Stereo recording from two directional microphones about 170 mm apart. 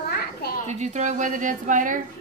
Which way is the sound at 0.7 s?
45° right (ahead or behind).